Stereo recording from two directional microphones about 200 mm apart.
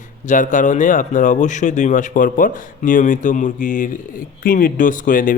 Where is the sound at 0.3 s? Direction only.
40° left (ahead or behind).